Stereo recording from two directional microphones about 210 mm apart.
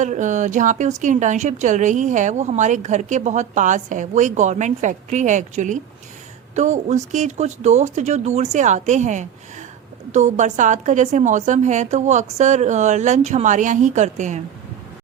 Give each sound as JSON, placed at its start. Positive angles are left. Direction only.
{"t": 0.0, "sound": "speech", "side_deg": -35}